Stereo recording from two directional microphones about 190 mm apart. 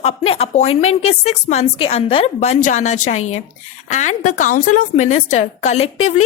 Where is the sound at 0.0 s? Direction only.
30° left (ahead or behind).